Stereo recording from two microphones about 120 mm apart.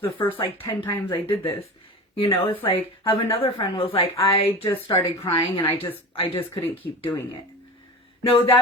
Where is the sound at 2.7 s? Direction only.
45° left (ahead or behind).